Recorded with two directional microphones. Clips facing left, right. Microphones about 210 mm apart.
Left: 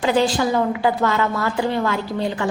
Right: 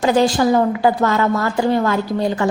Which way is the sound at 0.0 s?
40° right (ahead or behind).